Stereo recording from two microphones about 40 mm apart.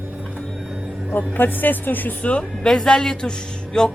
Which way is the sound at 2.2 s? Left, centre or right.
Left.